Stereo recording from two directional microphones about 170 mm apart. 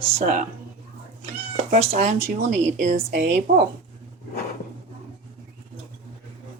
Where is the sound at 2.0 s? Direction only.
40° right (ahead or behind).